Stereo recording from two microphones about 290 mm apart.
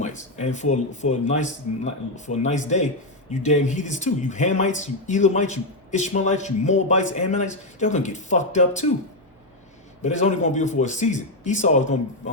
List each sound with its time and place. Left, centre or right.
0.0 s speech: left
10.0 s speech: left